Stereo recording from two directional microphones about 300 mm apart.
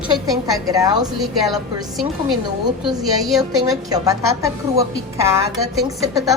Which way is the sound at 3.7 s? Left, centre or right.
Centre.